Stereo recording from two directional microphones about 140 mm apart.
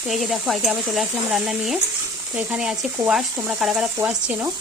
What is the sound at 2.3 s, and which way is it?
Speech, 10° right (ahead or behind).